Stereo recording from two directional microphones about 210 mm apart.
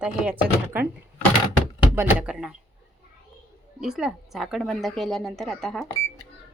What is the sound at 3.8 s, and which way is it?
A woman's voice, centre (ahead or behind).